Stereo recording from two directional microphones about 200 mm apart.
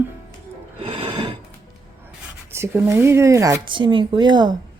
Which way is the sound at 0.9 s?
25° right (ahead or behind).